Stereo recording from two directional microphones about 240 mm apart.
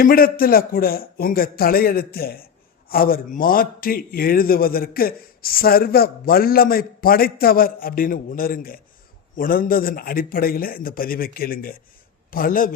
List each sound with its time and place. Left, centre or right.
0.0 s a man's voice: left